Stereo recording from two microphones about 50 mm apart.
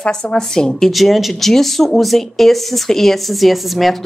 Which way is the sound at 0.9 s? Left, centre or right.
Centre.